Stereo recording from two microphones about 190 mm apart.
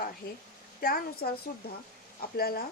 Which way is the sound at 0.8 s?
50° left (ahead or behind).